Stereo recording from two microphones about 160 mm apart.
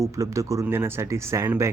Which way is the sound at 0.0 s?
20° right (ahead or behind).